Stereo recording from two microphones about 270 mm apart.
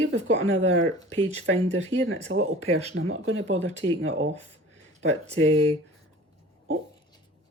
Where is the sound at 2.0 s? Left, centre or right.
Right.